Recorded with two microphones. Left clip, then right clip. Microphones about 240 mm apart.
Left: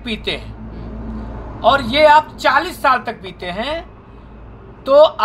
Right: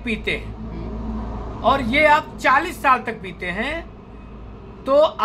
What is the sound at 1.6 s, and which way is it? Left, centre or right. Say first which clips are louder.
A woman's voice: left 5 dB; centre.